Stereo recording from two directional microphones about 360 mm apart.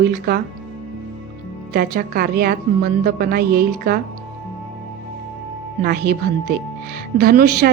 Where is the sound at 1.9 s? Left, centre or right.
Right.